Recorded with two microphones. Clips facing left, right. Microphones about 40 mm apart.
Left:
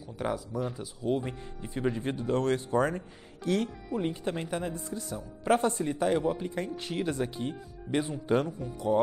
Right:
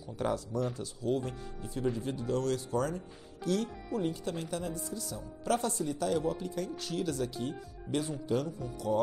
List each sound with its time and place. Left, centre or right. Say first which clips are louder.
0.2 s speech: even; centre